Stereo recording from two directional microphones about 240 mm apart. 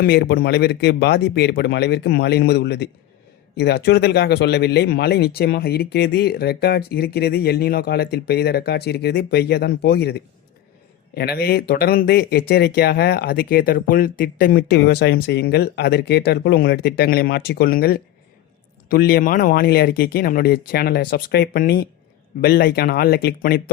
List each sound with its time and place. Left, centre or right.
0.0 s a man's voice: left